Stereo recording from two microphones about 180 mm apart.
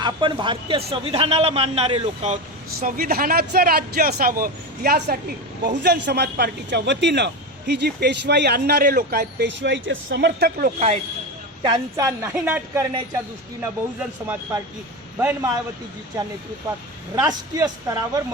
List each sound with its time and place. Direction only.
0.0 s a man's voice: 25° right (ahead or behind)
2.8 s a man's voice: 55° right (ahead or behind)
10.8 s a man's voice: 35° right (ahead or behind)
11.6 s a man's voice: 20° right (ahead or behind)
15.2 s a man's voice: 10° right (ahead or behind)
17.2 s speech: 20° right (ahead or behind)